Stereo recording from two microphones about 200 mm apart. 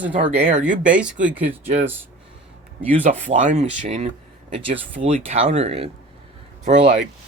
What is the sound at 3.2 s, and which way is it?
Speech, 40° right (ahead or behind).